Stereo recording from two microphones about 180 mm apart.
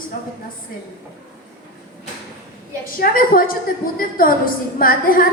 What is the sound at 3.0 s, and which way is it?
A woman's voice, 50° left (ahead or behind).